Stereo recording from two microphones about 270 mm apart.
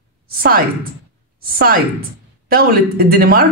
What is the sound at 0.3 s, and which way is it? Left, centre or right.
A woman's voice, right.